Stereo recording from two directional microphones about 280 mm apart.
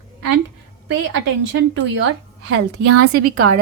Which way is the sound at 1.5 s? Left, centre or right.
Right.